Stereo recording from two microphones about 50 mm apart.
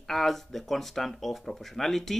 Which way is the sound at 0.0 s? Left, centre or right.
Centre.